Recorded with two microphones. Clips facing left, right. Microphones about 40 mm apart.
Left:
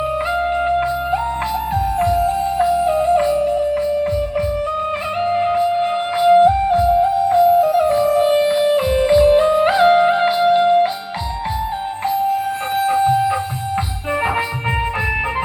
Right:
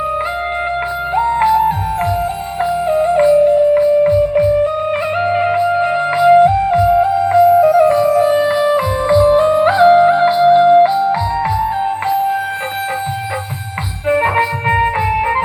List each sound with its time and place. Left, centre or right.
1.4 s music: right
2.9 s music: right
6.2 s music: right
14.3 s music: right